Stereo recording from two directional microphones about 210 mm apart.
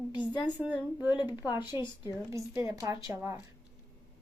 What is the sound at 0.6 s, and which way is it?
Speech, 5° right (ahead or behind).